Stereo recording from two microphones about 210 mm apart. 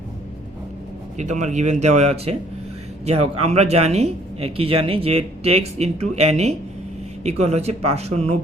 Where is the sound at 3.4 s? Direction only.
30° right (ahead or behind).